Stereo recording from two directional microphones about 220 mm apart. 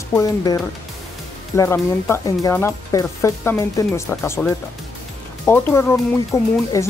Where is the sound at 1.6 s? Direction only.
10° left (ahead or behind).